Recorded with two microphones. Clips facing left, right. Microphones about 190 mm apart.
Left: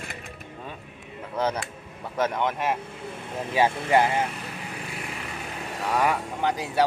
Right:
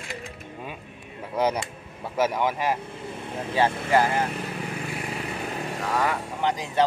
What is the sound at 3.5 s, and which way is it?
Speech, 15° left (ahead or behind).